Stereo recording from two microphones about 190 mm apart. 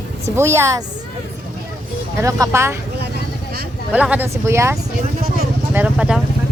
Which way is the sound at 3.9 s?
10° right (ahead or behind).